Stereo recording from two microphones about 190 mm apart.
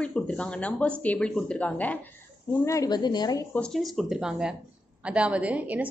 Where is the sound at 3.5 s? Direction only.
5° left (ahead or behind).